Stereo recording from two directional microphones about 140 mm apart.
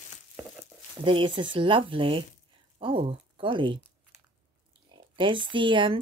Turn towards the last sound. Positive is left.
turn(degrees=-35)  # may be behind; listen again after turning